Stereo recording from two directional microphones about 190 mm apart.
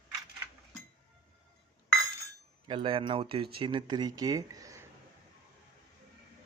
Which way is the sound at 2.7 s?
30° right (ahead or behind).